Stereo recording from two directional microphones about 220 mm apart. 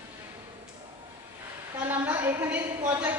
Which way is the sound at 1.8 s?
10° right (ahead or behind).